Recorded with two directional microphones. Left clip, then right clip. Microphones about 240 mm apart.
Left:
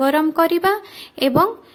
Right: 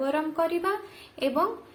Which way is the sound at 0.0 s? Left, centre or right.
Left.